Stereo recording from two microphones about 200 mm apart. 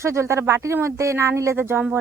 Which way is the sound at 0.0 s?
15° right (ahead or behind).